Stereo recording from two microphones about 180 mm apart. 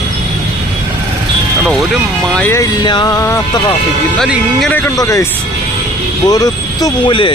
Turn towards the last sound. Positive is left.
turn(degrees=30)  # may be behind; listen again after turning